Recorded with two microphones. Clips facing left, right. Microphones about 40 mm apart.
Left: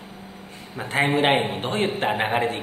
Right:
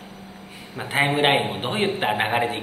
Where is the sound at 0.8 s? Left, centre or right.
Centre.